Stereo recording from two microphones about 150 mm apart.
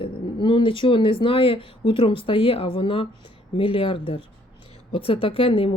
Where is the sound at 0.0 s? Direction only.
35° left (ahead or behind).